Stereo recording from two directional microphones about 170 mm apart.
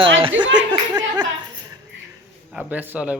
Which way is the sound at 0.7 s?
25° right (ahead or behind).